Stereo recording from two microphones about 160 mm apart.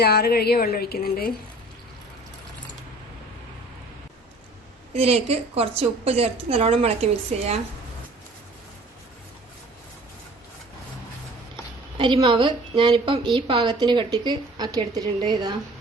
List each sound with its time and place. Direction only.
0.0 s speech: 80° left
4.9 s a woman's voice: 40° right (ahead or behind)
11.9 s a woman's voice: 35° right (ahead or behind)